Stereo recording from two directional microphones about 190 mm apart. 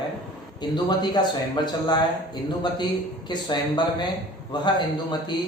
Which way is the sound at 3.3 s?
25° left (ahead or behind).